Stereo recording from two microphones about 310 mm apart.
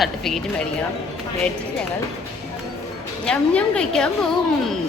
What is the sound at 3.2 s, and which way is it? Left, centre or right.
Speech, centre.